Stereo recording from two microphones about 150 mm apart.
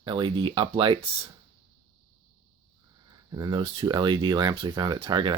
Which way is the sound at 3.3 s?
30° right (ahead or behind).